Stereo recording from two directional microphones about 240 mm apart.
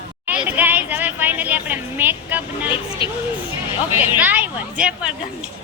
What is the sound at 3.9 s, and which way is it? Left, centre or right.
Speech, centre.